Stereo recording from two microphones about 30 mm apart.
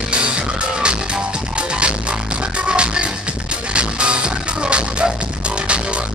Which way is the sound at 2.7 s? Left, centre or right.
Right.